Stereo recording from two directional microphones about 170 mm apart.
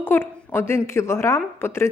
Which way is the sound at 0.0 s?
10° left (ahead or behind).